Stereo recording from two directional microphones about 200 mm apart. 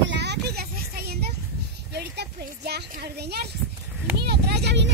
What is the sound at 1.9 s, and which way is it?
A child's voice, 55° right (ahead or behind).